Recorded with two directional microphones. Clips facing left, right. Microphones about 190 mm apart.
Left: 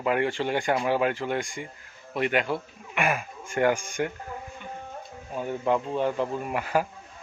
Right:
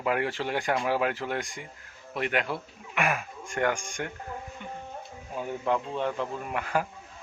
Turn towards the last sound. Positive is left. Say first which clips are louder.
# left 3 dB
turn(degrees=5)  # may be behind; listen again after turning